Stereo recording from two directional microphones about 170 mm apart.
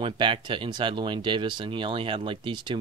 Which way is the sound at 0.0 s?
30° right (ahead or behind).